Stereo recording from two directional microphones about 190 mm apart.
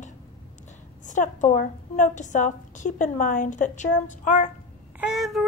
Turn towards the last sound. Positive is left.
turn(degrees=0)  # may be behind; listen again after turning